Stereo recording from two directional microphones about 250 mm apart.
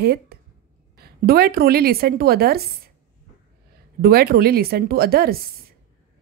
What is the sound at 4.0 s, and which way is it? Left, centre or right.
Speech, right.